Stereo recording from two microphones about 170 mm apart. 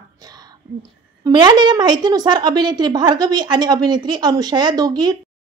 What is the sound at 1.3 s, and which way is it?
A woman's voice, 25° right (ahead or behind).